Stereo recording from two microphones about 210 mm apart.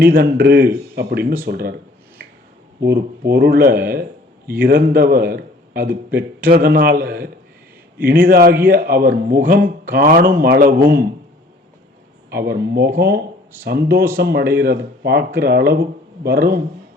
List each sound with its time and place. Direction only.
0.0 s a man's voice: 45° right (ahead or behind)
2.2 s finger snapping: 50° right (ahead or behind)
2.8 s a man's voice: 45° right (ahead or behind)
12.3 s a man's voice: 45° right (ahead or behind)